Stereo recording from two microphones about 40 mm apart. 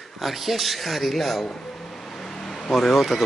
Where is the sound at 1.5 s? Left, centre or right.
Centre.